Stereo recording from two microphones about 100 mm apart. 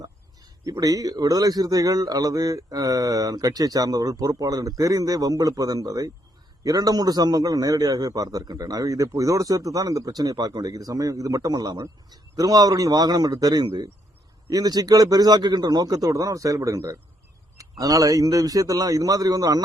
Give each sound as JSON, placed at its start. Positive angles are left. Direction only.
{"t": 0.6, "sound": "a man's voice", "side_deg": -35}